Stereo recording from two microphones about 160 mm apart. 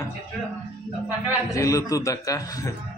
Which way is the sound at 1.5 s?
20° left (ahead or behind).